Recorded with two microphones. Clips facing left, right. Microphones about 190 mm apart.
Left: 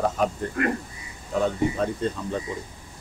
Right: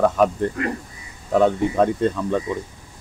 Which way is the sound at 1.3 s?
90° right.